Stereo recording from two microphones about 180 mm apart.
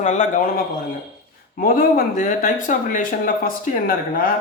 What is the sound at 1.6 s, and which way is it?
Speech, 55° left (ahead or behind).